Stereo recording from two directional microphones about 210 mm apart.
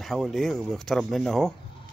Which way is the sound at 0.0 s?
Centre (ahead or behind).